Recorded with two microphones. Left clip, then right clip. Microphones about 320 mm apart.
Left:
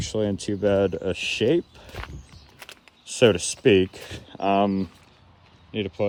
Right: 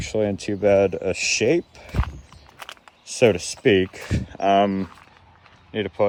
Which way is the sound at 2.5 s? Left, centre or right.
Centre.